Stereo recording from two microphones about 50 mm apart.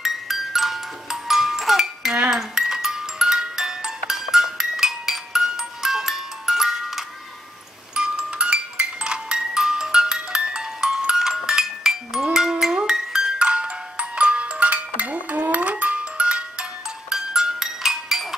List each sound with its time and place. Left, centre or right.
0.0 s music: centre